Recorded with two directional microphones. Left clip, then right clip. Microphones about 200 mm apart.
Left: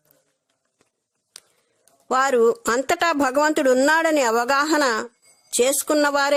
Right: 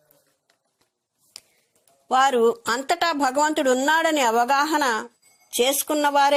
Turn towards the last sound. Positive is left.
turn(degrees=20)  # may be behind; listen again after turning